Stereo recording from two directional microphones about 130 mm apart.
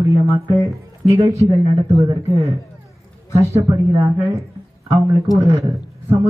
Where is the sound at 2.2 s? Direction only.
55° right (ahead or behind).